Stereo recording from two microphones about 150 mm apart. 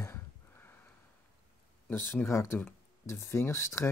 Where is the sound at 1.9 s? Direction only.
15° left (ahead or behind).